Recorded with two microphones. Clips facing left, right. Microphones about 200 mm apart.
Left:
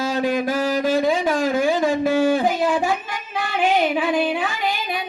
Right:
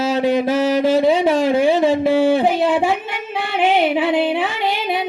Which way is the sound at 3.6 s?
25° right (ahead or behind).